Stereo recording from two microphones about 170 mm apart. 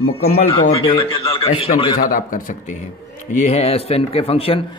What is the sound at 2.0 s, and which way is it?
Speech, 55° left (ahead or behind).